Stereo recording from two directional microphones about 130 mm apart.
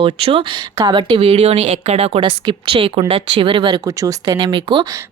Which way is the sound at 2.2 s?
40° right (ahead or behind).